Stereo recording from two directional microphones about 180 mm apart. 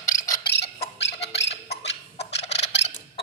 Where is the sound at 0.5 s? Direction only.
65° left (ahead or behind).